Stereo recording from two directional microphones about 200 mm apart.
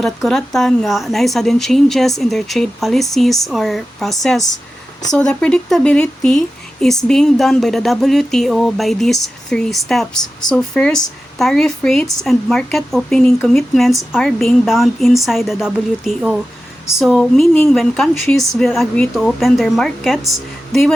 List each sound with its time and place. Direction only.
0.0 s speech: centre (ahead or behind)